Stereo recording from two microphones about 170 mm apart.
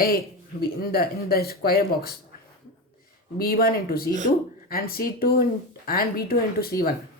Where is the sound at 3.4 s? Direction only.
60° left (ahead or behind).